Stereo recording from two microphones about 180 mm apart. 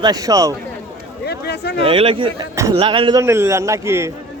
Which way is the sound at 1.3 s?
65° left (ahead or behind).